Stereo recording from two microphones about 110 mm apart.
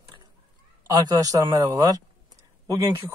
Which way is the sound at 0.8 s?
35° right (ahead or behind).